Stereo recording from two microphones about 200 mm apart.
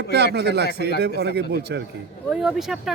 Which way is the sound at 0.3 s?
55° right (ahead or behind).